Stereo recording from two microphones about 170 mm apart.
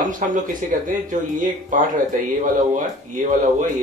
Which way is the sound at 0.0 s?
50° right (ahead or behind).